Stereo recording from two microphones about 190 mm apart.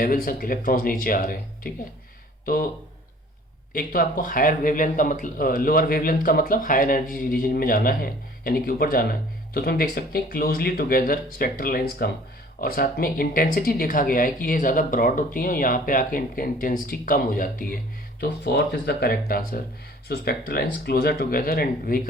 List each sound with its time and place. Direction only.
0.0 s speech: 50° left (ahead or behind)
3.7 s speech: 50° left (ahead or behind)
18.2 s speech: 60° left (ahead or behind)